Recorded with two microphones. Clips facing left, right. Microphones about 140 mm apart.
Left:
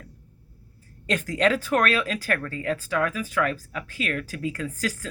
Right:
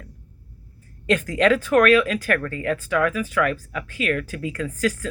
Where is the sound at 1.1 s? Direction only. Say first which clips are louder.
Right 4 dB; 35° left (ahead or behind).